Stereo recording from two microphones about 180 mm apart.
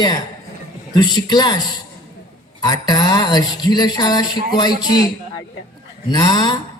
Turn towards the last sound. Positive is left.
turn(degrees=25)  # may be behind; listen again after turning